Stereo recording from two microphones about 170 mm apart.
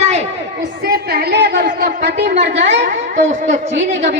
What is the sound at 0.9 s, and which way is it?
A woman's voice, 70° right (ahead or behind).